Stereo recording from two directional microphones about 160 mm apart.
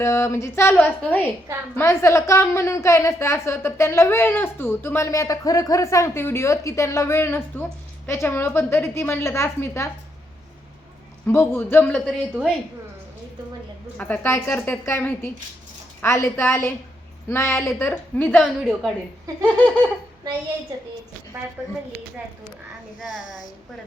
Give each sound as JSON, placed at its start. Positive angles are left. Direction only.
{"t": 0.0, "sound": "a woman's voice", "side_deg": 15}
{"t": 11.3, "sound": "a woman's voice", "side_deg": 15}
{"t": 12.0, "sound": "a woman's voice", "side_deg": 0}
{"t": 14.0, "sound": "a woman's voice", "side_deg": 10}
{"t": 18.3, "sound": "a woman's voice", "side_deg": -5}
{"t": 19.3, "sound": "laughter", "side_deg": -20}